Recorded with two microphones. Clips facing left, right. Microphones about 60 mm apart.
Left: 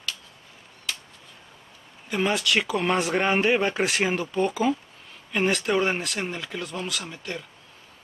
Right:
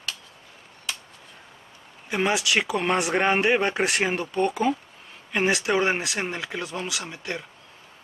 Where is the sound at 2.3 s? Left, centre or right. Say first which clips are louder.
Even; centre.